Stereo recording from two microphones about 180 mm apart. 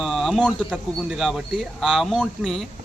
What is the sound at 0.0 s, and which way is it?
Speech, centre (ahead or behind).